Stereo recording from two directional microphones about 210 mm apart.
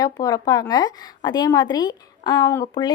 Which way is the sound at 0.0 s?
15° left (ahead or behind).